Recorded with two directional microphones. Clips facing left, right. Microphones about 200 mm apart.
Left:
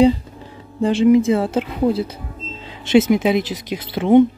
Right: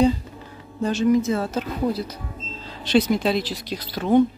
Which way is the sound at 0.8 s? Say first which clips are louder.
Left 6 dB; 25° left (ahead or behind).